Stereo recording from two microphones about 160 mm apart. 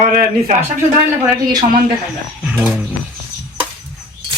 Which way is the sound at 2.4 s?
10° right (ahead or behind).